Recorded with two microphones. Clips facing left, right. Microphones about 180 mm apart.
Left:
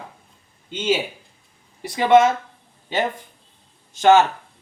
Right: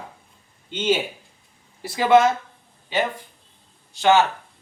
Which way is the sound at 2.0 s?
20° left (ahead or behind).